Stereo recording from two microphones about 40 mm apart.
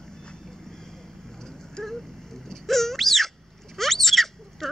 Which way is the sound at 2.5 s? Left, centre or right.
Centre.